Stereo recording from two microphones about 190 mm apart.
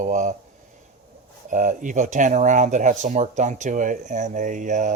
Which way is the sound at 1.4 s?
40° right (ahead or behind).